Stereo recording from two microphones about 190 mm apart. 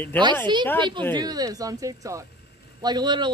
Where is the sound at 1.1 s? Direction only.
20° right (ahead or behind).